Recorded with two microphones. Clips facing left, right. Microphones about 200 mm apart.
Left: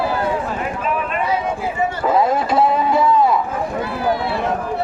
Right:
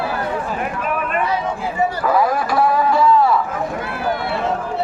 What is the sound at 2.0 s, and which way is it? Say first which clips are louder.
Vehicle: left 3 dB; 25° left (ahead or behind).